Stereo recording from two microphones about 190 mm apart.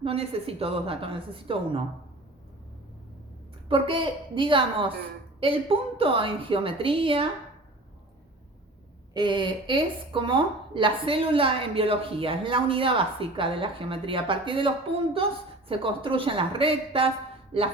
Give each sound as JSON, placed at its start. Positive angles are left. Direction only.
{"t": 0.0, "sound": "a woman's voice", "side_deg": -30}
{"t": 3.7, "sound": "a woman's voice", "side_deg": -25}
{"t": 9.1, "sound": "a woman's voice", "side_deg": -25}
{"t": 15.7, "sound": "a woman's voice", "side_deg": -25}